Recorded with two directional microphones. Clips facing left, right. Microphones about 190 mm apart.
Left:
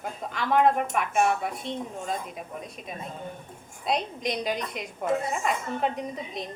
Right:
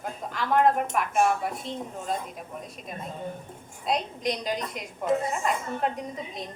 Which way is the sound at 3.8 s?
Centre (ahead or behind).